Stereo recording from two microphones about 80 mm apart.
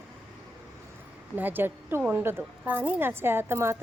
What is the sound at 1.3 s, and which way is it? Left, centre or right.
A woman's voice, right.